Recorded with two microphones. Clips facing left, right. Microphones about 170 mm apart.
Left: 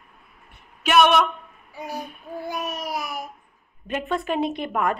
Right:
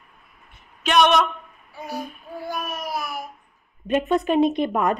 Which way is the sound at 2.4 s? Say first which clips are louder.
Even; 20° left (ahead or behind).